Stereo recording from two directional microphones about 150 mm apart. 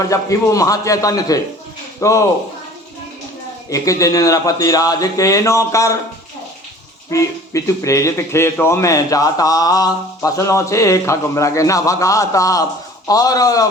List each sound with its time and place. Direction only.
0.0 s a man's voice: 20° left (ahead or behind)
3.7 s a man's voice: 20° left (ahead or behind)
7.1 s a man's voice: 20° left (ahead or behind)